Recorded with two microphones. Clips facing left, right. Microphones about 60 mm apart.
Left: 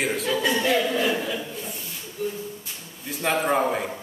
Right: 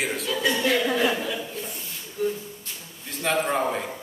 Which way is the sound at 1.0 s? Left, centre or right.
Centre.